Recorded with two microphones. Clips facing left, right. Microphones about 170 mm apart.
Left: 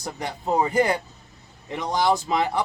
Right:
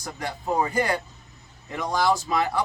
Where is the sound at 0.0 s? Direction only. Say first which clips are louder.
Left 2 dB; 20° left (ahead or behind).